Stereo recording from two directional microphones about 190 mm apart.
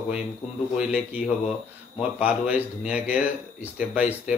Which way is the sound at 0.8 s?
5° right (ahead or behind).